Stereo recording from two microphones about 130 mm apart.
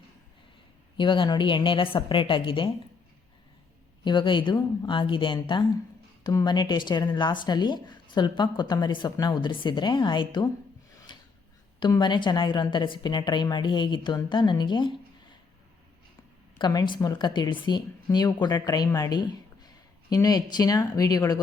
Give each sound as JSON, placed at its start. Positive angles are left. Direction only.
{"t": 0.9, "sound": "speech", "side_deg": 40}
{"t": 4.0, "sound": "speech", "side_deg": 35}
{"t": 11.8, "sound": "speech", "side_deg": 35}
{"t": 16.6, "sound": "speech", "side_deg": 35}